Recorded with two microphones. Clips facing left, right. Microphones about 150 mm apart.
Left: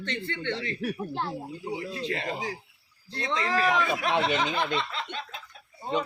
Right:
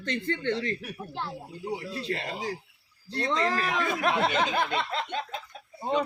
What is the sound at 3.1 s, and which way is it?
Speech, 40° right (ahead or behind).